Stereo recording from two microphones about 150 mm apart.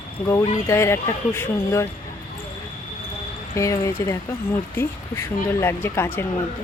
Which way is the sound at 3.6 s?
20° left (ahead or behind).